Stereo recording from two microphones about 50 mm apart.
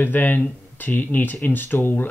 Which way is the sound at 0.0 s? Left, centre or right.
Left.